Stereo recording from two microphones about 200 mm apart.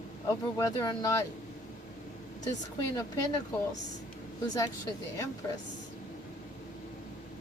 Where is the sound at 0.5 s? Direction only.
20° left (ahead or behind).